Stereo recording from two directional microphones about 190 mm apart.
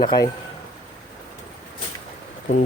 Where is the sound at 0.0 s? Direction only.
25° left (ahead or behind).